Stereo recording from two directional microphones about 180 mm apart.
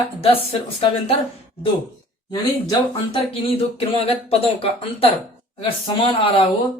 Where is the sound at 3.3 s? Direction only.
30° left (ahead or behind).